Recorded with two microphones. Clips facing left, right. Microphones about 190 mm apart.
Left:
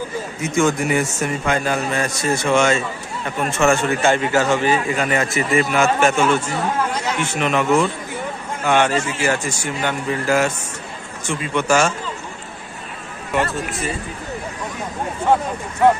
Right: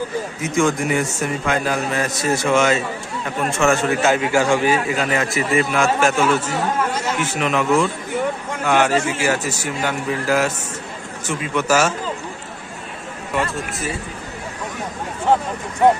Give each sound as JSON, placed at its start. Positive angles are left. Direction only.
{"t": 0.4, "sound": "a man's voice", "side_deg": 0}
{"t": 13.3, "sound": "a man's voice", "side_deg": 0}